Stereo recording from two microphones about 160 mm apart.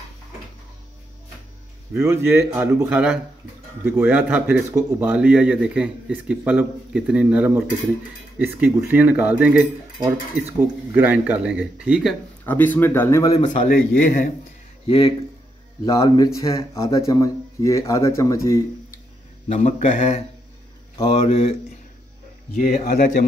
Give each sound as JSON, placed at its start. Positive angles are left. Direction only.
{"t": 2.0, "sound": "a man's voice", "side_deg": -15}
{"t": 12.4, "sound": "speech", "side_deg": 10}
{"t": 14.0, "sound": "a man's voice", "side_deg": 55}
{"t": 14.9, "sound": "speech", "side_deg": 35}
{"t": 15.8, "sound": "speech", "side_deg": 25}
{"t": 19.5, "sound": "a man's voice", "side_deg": 50}
{"t": 22.6, "sound": "a man's voice", "side_deg": 55}